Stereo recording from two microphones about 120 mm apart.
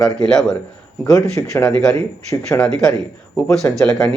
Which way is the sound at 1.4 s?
20° left (ahead or behind).